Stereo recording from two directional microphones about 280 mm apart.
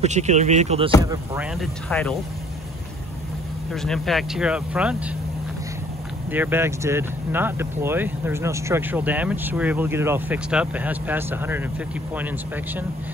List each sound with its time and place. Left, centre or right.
0.0 s speech: right
1.0 s speech: centre
3.7 s speech: centre
6.3 s speech: centre